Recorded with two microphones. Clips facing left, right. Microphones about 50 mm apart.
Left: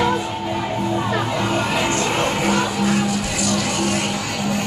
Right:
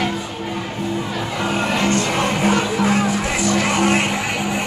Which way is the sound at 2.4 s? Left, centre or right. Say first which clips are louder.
Right 2 dB; right.